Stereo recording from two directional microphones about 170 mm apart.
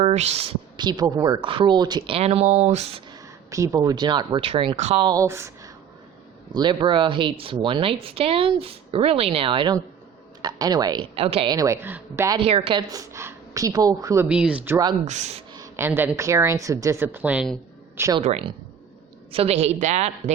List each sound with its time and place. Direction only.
0.0 s a woman's voice: 40° right (ahead or behind)
3.1 s speech: 20° right (ahead or behind); by 5.0 s 35° right (ahead or behind)
5.0 s a woman's voice: 20° right (ahead or behind)
12.4 s a woman's voice: 35° right (ahead or behind)
12.9 s a woman's voice: 20° right (ahead or behind)
14.3 s a woman's voice: 5° right (ahead or behind)
15.0 s speech: 45° right (ahead or behind)
15.5 s a woman's voice: 15° right (ahead or behind)
18.2 s a woman's voice: 40° right (ahead or behind)